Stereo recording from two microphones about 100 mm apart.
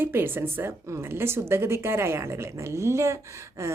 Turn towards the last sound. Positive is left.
turn(degrees=-30)  # may be behind; listen again after turning